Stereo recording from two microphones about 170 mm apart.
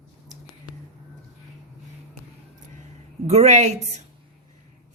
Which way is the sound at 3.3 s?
40° right (ahead or behind).